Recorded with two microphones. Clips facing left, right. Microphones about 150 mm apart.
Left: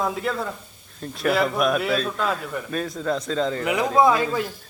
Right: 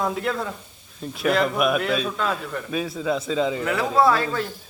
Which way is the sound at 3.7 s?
15° left (ahead or behind).